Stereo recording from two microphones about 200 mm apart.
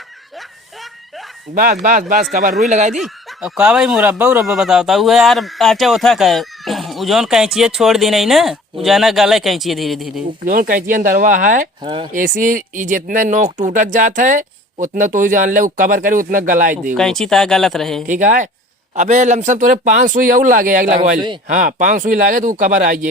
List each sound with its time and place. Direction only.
1.5 s speech: 45° right (ahead or behind)
2.9 s speech: 5° right (ahead or behind)
10.4 s speech: 45° right (ahead or behind)
11.8 s speech: 20° right (ahead or behind)
12.1 s speech: 40° right (ahead or behind)
17.0 s speech: 5° left (ahead or behind)
18.0 s speech: 40° right (ahead or behind)